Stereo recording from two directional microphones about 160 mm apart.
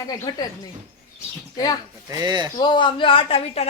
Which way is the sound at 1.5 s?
25° left (ahead or behind).